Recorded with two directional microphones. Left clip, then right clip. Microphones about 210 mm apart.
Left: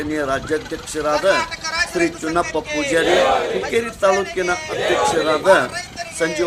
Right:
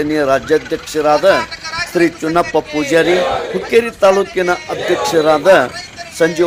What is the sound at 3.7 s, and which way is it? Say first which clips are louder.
Speech: right 8 dB; 35° right (ahead or behind).